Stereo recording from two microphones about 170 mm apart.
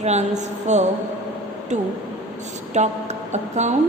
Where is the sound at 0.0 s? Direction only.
40° right (ahead or behind).